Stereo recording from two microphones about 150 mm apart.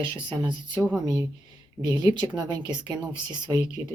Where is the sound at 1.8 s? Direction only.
25° right (ahead or behind).